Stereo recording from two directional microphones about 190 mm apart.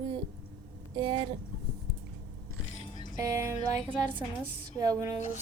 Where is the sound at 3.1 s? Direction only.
15° right (ahead or behind).